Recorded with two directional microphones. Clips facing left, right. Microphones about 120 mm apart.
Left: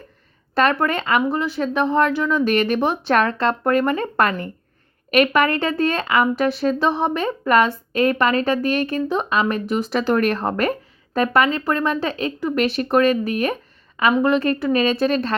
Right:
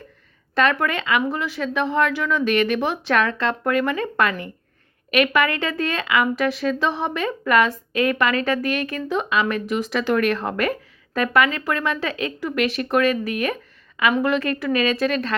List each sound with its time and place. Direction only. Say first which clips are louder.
0.5 s speech: left 2 dB; 35° left (ahead or behind)